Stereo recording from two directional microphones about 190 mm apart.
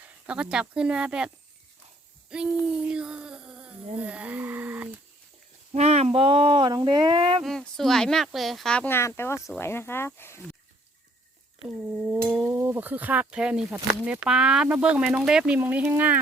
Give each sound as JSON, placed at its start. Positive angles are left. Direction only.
{"t": 0.0, "sound": "speech", "side_deg": -5}
{"t": 2.3, "sound": "speech", "side_deg": -5}
{"t": 2.6, "sound": "a sound", "side_deg": -5}
{"t": 5.7, "sound": "a sound", "side_deg": -35}
{"t": 7.4, "sound": "speech", "side_deg": 0}
{"t": 11.6, "sound": "speech", "side_deg": -5}